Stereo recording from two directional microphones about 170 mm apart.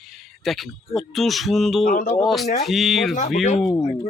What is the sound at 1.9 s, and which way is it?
Speech, 50° left (ahead or behind).